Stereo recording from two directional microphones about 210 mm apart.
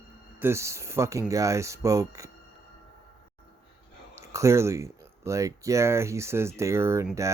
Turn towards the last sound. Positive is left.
turn(degrees=-10)  # may be behind; listen again after turning